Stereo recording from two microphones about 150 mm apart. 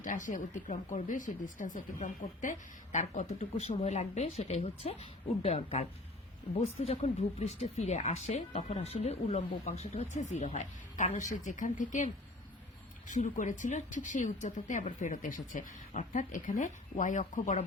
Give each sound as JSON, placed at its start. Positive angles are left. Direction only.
{"t": 0.0, "sound": "speech", "side_deg": 60}